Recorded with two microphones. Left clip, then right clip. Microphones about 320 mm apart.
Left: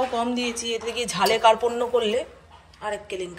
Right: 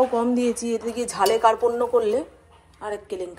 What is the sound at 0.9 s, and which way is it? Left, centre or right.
Speech, right.